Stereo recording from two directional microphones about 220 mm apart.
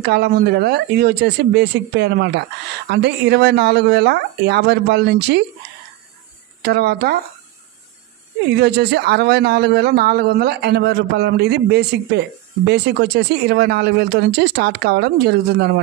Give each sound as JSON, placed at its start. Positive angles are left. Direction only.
{"t": 0.0, "sound": "a man's voice", "side_deg": -45}
{"t": 6.6, "sound": "a man's voice", "side_deg": -45}
{"t": 8.5, "sound": "a man's voice", "side_deg": -50}